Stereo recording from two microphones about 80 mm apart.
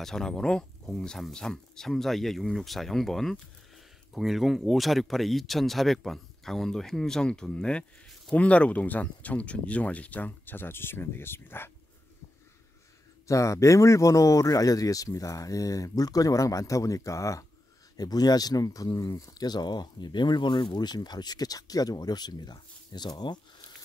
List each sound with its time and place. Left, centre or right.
0.0 s speech: centre; by 11.7 s left
13.3 s speech: left
17.9 s speech: left